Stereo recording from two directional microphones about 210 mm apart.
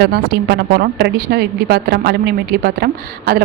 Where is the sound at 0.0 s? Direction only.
50° right (ahead or behind).